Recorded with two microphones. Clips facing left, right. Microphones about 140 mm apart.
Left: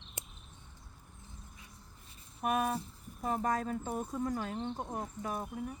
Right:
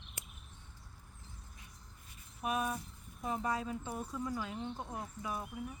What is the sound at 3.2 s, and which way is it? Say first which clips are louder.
Speech: left 4 dB; 50° left (ahead or behind).